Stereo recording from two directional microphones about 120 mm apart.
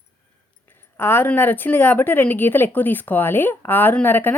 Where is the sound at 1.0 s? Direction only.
20° left (ahead or behind).